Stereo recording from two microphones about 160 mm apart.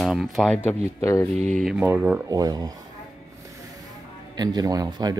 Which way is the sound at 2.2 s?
25° right (ahead or behind).